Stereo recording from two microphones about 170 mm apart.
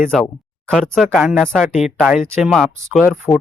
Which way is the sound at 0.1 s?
Centre (ahead or behind).